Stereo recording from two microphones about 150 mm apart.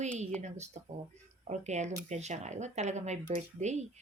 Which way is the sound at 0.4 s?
50° right (ahead or behind).